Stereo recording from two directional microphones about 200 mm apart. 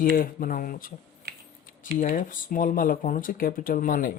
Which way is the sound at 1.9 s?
40° left (ahead or behind).